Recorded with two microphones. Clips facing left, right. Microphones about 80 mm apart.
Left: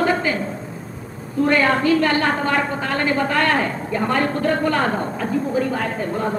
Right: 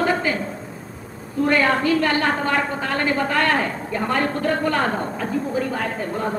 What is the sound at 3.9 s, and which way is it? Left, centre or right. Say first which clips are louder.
Speech: left 2 dB; left.